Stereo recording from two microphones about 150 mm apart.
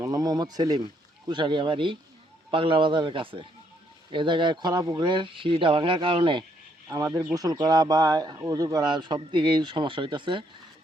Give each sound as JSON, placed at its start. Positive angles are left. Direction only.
{"t": 0.0, "sound": "speech", "side_deg": -25}
{"t": 6.8, "sound": "speech", "side_deg": -20}